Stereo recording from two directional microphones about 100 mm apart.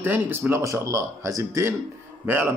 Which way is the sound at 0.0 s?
20° right (ahead or behind).